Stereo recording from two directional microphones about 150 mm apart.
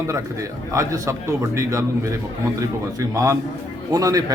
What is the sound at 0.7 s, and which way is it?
A man's voice, 20° right (ahead or behind).